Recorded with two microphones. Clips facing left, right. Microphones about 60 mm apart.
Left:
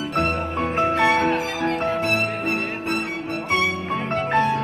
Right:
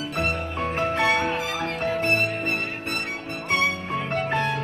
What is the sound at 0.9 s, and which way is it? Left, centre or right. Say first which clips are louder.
Music: left 3 dB; left.